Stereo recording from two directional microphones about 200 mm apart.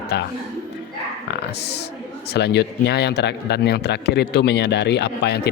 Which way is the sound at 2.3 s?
55° left (ahead or behind).